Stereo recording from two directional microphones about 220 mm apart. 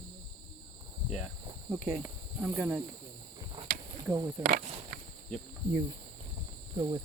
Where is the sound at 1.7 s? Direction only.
Centre (ahead or behind).